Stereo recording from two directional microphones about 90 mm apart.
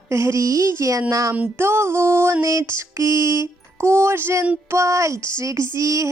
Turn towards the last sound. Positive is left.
turn(degrees=-40)  # may be behind; listen again after turning